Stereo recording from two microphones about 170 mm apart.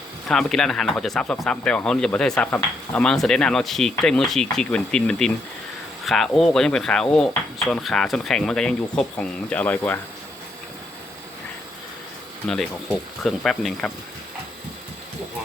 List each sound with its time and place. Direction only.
0.3 s speech: centre (ahead or behind)
12.5 s speech: centre (ahead or behind)